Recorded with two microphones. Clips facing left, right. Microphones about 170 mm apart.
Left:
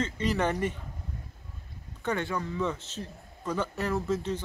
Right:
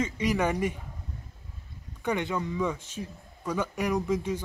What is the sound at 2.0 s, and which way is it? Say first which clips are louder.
A man's voice: right 2 dB; 15° right (ahead or behind).